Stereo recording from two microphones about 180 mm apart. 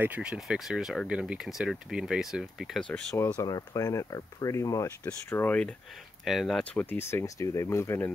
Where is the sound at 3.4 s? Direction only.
20° left (ahead or behind).